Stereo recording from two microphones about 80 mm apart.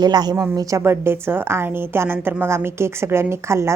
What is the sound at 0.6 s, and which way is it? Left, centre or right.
A woman's voice, right.